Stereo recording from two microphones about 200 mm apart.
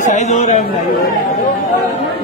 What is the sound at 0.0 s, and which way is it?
Speech, 35° left (ahead or behind).